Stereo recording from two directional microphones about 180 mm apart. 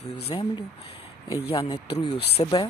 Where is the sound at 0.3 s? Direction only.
25° left (ahead or behind).